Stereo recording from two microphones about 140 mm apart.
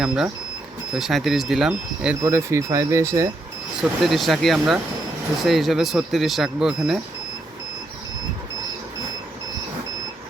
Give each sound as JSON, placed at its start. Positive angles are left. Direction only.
{"t": 0.9, "sound": "speech", "side_deg": 0}
{"t": 2.2, "sound": "speech", "side_deg": -20}
{"t": 3.8, "sound": "speech", "side_deg": 0}